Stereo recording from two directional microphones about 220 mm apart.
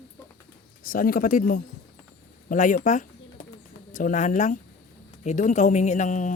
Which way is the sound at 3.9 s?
35° left (ahead or behind).